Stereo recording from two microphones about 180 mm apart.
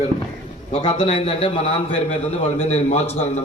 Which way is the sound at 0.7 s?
30° left (ahead or behind).